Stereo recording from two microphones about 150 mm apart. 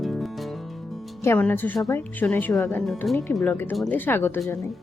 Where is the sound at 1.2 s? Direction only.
15° left (ahead or behind).